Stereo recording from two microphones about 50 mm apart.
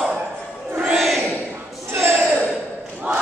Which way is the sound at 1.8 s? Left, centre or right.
Right.